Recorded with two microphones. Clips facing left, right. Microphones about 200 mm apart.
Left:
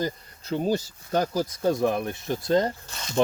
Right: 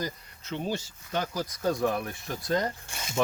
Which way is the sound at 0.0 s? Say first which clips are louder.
Left 6 dB; 35° left (ahead or behind).